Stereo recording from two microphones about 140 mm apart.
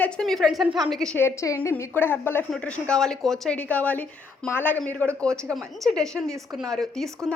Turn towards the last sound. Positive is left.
turn(degrees=0)  # may be behind; listen again after turning